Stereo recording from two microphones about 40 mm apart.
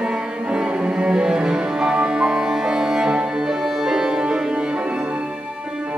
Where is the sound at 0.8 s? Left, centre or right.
Right.